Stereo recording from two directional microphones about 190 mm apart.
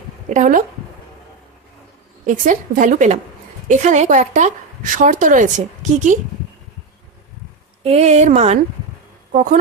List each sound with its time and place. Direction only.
0.3 s a woman's voice: 40° right (ahead or behind)
2.2 s a woman's voice: 45° right (ahead or behind)
7.9 s a woman's voice: 35° right (ahead or behind)